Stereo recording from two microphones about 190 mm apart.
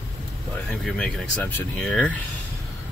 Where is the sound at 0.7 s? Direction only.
5° left (ahead or behind).